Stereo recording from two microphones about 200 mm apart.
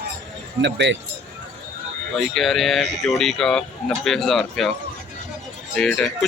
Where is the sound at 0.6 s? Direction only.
60° right (ahead or behind).